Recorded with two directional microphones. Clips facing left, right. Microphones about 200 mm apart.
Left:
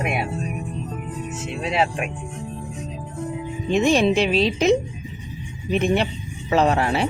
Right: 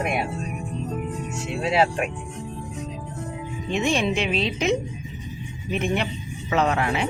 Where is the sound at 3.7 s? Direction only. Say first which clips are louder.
Left 6 dB; 40° left (ahead or behind).